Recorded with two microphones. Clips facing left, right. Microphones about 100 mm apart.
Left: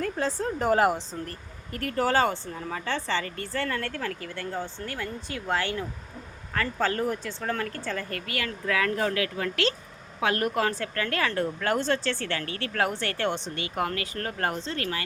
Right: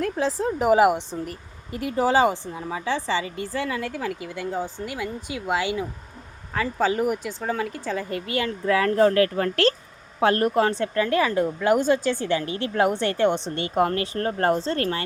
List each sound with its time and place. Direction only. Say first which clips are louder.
0.0 s speech: right 4 dB; centre (ahead or behind)
8.3 s speech: right 7 dB; 25° right (ahead or behind)
13.6 s speech: right 7 dB; 30° right (ahead or behind)